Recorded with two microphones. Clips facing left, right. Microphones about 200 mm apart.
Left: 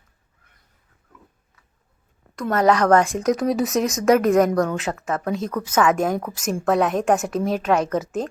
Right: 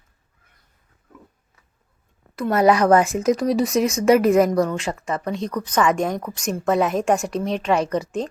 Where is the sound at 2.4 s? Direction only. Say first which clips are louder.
Right 1 dB; 10° right (ahead or behind).